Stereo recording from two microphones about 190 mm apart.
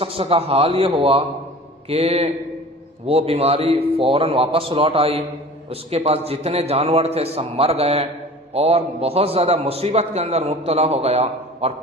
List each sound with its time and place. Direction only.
0.0 s a man's voice: 30° right (ahead or behind)